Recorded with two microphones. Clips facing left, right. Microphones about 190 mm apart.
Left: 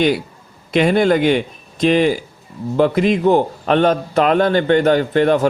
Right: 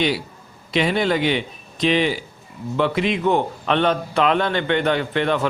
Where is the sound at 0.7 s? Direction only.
50° left (ahead or behind).